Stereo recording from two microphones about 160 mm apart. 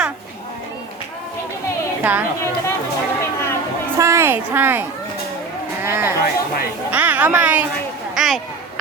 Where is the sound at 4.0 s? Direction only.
15° right (ahead or behind).